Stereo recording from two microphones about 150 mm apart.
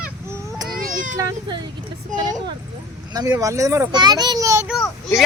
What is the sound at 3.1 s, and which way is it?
Speech, 25° right (ahead or behind).